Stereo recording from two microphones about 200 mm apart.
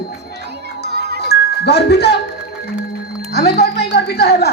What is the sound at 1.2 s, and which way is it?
Music, 55° left (ahead or behind).